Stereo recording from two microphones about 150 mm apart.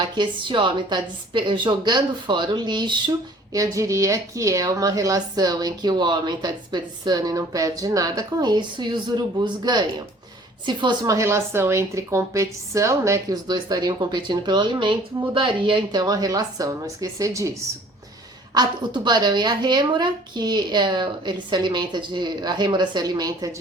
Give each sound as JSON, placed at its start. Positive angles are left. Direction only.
{"t": 0.0, "sound": "a woman's voice", "side_deg": -30}
{"t": 18.5, "sound": "speech", "side_deg": -30}